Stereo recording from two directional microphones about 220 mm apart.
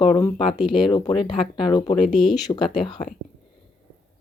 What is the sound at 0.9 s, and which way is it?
Speech, 20° left (ahead or behind).